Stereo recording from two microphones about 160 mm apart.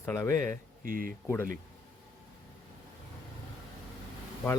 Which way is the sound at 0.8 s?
60° right (ahead or behind).